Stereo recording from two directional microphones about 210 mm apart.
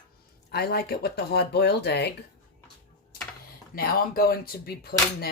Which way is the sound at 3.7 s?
45° left (ahead or behind).